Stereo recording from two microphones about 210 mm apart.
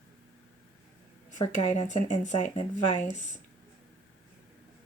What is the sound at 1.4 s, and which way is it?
Speech, 30° left (ahead or behind).